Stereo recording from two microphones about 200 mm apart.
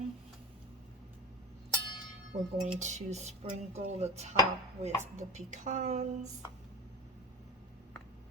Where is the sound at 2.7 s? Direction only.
35° right (ahead or behind).